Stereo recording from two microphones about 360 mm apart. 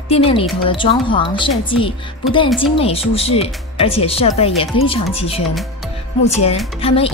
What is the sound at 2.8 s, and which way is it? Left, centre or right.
Speech, centre.